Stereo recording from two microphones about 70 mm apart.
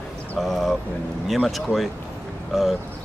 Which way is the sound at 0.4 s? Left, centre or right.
Centre.